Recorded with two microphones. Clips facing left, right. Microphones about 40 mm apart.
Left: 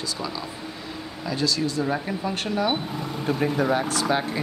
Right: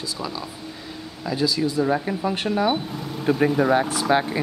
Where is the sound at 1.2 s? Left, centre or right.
Centre.